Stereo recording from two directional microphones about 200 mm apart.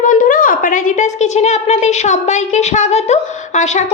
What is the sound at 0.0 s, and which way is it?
A woman's voice, 40° left (ahead or behind).